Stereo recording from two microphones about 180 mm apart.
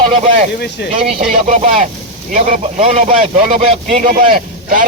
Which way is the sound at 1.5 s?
40° right (ahead or behind).